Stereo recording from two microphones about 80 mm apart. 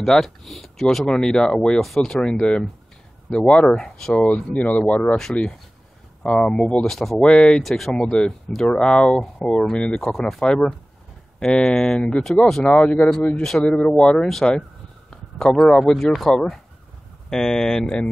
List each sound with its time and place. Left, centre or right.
0.0 s speech: centre
7.6 s speech: centre
15.0 s a sound: centre
15.8 s speech: centre